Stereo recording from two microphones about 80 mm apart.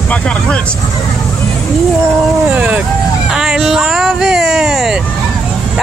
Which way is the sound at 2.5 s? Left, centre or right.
Centre.